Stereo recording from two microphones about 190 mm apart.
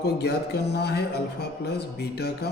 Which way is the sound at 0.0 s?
60° left (ahead or behind).